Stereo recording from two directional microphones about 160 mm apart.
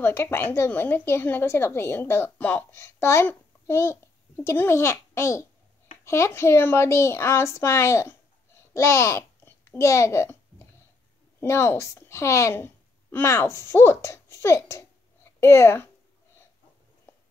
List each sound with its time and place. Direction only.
0.0 s a woman's voice: 15° left (ahead or behind)
8.7 s babbling: 15° left (ahead or behind)
11.3 s a woman's voice: 15° left (ahead or behind)